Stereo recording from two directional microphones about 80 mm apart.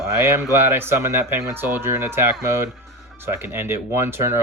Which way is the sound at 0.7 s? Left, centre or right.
Right.